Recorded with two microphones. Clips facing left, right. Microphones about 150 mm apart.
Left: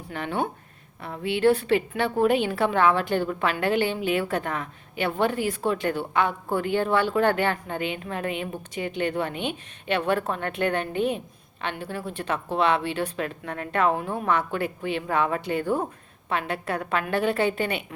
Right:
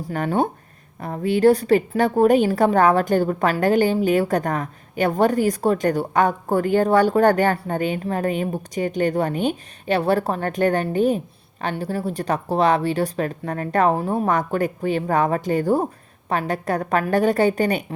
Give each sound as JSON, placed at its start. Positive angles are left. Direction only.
{"t": 0.0, "sound": "a woman's voice", "side_deg": -40}